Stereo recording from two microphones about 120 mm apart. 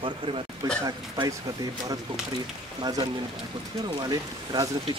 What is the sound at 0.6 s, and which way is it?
Speech, 35° right (ahead or behind).